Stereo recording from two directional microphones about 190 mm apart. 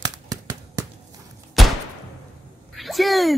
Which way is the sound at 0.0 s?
20° right (ahead or behind).